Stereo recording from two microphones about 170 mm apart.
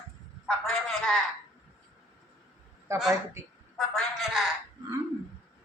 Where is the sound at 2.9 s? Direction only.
15° right (ahead or behind).